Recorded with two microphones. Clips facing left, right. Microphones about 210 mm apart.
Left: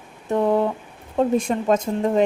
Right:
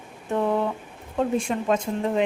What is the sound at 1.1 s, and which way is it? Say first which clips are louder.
Speech: left 4 dB; 40° left (ahead or behind).